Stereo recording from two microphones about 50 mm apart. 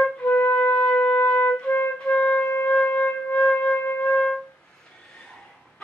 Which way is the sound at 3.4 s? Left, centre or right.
Left.